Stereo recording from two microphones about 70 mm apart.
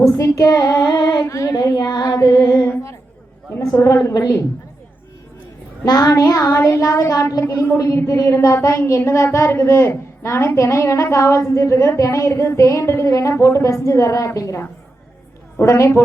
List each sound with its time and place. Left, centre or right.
0.2 s child singing: left
0.9 s a sound: left
1.3 s a woman's voice: left
1.7 s female singing: left
2.0 s child singing: left
3.8 s child singing: left
5.8 s child singing: left
6.6 s a woman's voice: left
7.4 s a woman's voice: left
8.0 s a woman's voice: left
15.6 s a woman's voice: left